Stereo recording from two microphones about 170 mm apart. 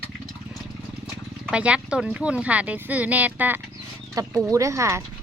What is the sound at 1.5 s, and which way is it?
Speech, 5° right (ahead or behind).